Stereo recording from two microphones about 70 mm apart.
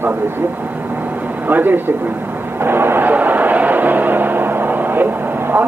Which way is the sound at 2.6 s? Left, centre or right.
Right.